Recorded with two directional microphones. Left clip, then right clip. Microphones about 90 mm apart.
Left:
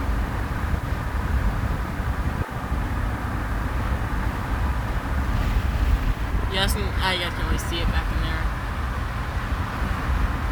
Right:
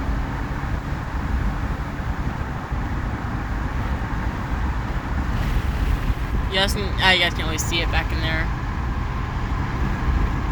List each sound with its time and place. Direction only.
6.6 s speech: 20° left (ahead or behind)
7.0 s speech: 5° left (ahead or behind)